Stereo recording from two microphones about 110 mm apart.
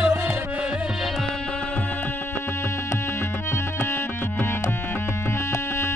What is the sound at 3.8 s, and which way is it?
Music, 25° left (ahead or behind).